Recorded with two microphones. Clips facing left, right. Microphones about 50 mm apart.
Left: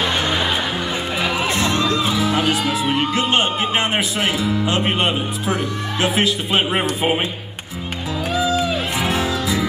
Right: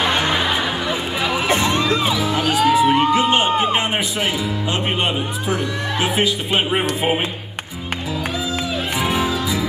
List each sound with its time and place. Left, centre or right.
0.0 s music: centre
1.5 s music: right
2.1 s music: centre
3.1 s speech: centre
8.4 s music: centre